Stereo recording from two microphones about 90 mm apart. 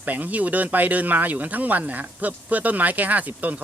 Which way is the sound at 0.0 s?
20° right (ahead or behind).